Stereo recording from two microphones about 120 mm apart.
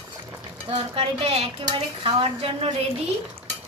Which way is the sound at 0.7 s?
55° right (ahead or behind).